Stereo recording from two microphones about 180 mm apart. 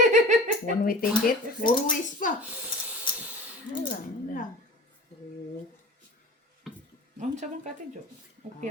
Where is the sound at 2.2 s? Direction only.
45° left (ahead or behind).